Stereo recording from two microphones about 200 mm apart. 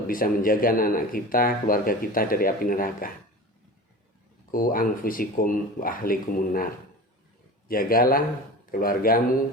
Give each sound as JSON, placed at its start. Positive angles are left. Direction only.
{"t": 0.1, "sound": "speech", "side_deg": 45}
{"t": 4.5, "sound": "speech", "side_deg": 45}
{"t": 7.7, "sound": "speech", "side_deg": 45}